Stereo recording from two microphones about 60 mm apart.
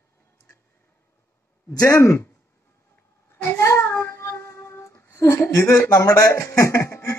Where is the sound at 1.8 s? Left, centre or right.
Left.